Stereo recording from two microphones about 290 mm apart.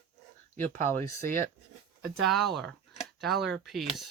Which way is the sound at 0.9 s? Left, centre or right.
Right.